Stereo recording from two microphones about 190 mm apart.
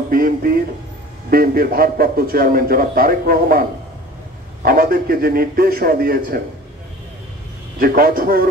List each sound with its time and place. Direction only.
0.1 s a man's voice: 50° right (ahead or behind)
4.6 s a man's voice: 50° right (ahead or behind)
7.8 s a man's voice: 50° right (ahead or behind)